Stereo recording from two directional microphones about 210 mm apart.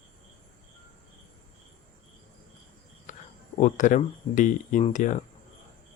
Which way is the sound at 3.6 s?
40° left (ahead or behind).